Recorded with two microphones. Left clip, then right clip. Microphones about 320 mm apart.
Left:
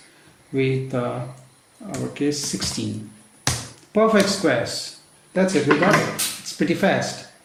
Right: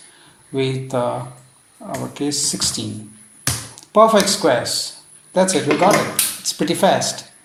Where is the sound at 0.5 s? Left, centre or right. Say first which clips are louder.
Right 1 dB; centre.